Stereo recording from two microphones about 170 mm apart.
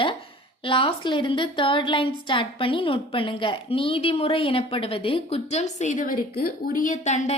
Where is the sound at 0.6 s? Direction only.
30° left (ahead or behind).